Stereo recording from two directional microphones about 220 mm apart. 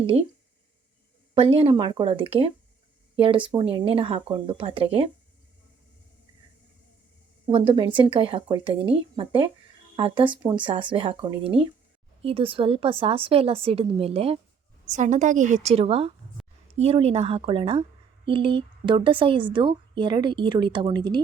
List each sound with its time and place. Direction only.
0.0 s speech: 25° right (ahead or behind)
1.3 s speech: 25° right (ahead or behind)
7.4 s a woman's voice: 25° right (ahead or behind)